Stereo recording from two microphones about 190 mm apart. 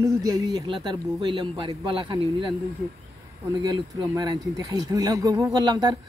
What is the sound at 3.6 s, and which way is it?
Speech, 20° right (ahead or behind).